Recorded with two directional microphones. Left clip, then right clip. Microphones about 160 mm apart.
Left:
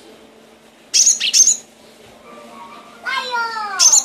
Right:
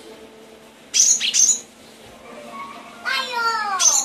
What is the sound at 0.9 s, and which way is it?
Bird, 30° left (ahead or behind).